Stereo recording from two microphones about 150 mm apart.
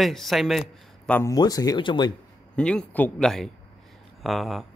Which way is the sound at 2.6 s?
5° left (ahead or behind).